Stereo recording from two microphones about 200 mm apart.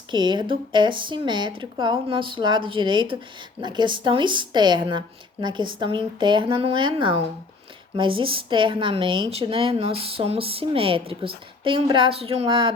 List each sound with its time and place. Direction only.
0.1 s speech: 25° right (ahead or behind)